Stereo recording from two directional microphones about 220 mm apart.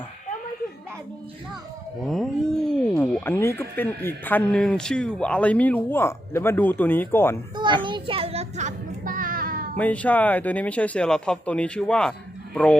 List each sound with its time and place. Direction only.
2.0 s speech: centre (ahead or behind)
7.5 s children playing: 20° right (ahead or behind)
7.9 s a sound: 20° right (ahead or behind); by 9.6 s 40° right (ahead or behind)
9.7 s speech: 5° left (ahead or behind)